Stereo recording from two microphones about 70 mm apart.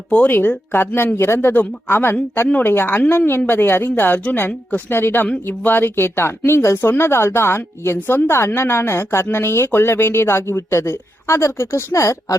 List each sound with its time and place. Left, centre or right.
0.3 s speech: left